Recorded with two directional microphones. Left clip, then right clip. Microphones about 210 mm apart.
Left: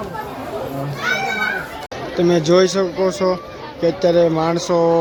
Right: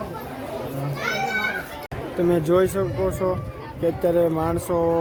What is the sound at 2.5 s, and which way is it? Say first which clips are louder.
Speech: left 6 dB; 10° left (ahead or behind).